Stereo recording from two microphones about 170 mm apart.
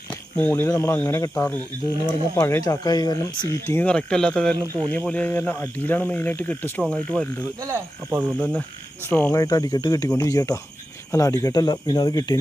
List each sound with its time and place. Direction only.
0.1 s a sound: 10° left (ahead or behind)
0.7 s speech: 15° left (ahead or behind)
3.8 s speech: 5° left (ahead or behind)
7.6 s speech: 15° right (ahead or behind)
9.0 s speech: 10° left (ahead or behind)
9.4 s speech: 20° left (ahead or behind)